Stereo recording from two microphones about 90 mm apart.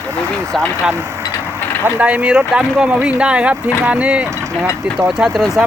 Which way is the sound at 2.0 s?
15° right (ahead or behind).